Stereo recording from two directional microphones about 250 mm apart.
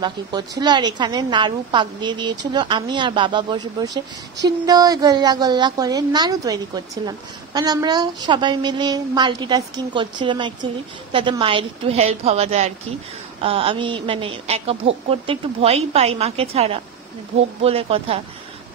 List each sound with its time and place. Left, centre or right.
0.0 s a woman's voice: centre